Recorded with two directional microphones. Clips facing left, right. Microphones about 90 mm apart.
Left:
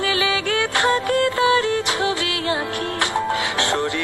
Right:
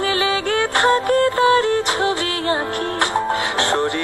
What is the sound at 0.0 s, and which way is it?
Music, 35° right (ahead or behind).